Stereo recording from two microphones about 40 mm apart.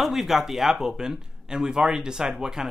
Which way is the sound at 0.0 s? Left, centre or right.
Centre.